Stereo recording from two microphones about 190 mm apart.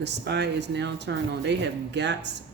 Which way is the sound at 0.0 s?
65° right (ahead or behind).